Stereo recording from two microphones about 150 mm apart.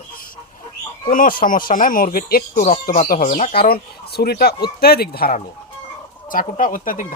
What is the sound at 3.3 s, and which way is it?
Speech, 45° left (ahead or behind).